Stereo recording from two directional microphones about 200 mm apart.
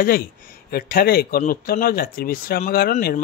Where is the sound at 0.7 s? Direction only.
50° left (ahead or behind).